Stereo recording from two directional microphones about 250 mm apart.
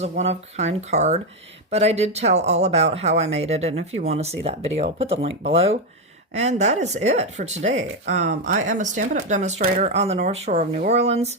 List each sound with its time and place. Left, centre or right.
0.0 s speech: right